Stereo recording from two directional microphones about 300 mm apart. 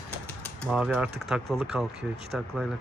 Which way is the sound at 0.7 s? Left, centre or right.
Centre.